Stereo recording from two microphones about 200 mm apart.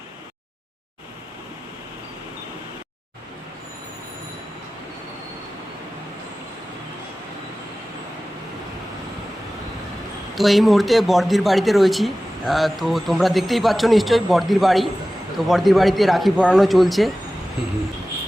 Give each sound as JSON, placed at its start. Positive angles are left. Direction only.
{"t": 10.3, "sound": "speech", "side_deg": 0}